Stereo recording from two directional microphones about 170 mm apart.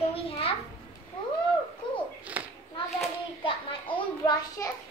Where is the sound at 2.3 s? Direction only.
10° right (ahead or behind).